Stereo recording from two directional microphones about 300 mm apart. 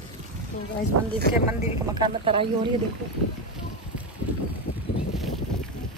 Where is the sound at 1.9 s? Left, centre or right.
Centre.